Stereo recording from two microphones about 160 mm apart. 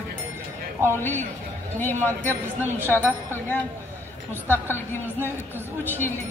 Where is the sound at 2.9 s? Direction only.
10° left (ahead or behind).